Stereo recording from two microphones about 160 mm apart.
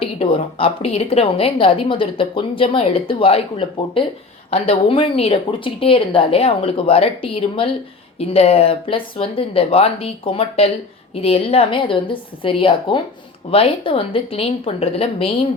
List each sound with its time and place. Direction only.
0.0 s a woman's voice: 35° left (ahead or behind)